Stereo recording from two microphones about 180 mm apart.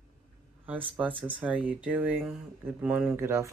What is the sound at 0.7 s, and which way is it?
Speech, 10° right (ahead or behind).